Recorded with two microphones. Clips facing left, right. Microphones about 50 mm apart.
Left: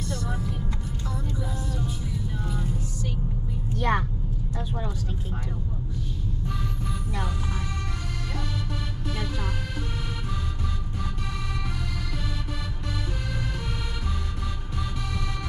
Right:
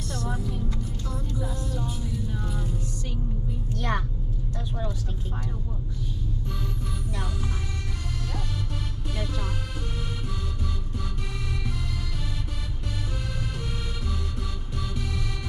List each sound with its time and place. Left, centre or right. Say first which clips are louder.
3.7 s vehicle: left 4 dB; centre